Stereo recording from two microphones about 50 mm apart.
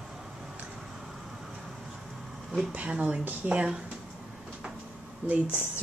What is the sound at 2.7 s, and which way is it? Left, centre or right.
Speech, right.